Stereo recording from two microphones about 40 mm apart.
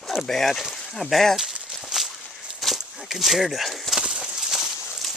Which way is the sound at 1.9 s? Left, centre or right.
Centre.